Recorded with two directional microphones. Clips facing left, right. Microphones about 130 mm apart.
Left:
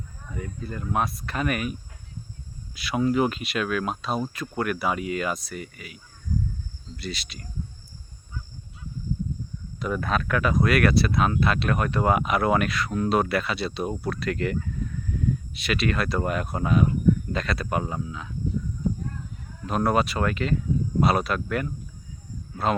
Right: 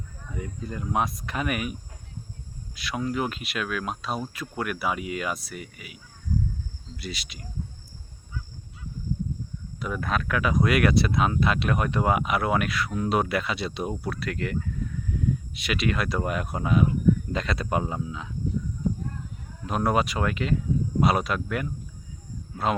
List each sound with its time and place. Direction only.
0.3 s speech: 15° right (ahead or behind)
2.7 s speech: 5° left (ahead or behind); by 7.4 s 15° right (ahead or behind)
9.8 s speech: 5° right (ahead or behind)
15.5 s speech: 15° right (ahead or behind)
19.6 s speech: 15° right (ahead or behind)